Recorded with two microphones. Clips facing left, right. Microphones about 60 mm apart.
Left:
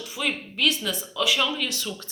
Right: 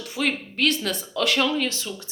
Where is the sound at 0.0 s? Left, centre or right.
Right.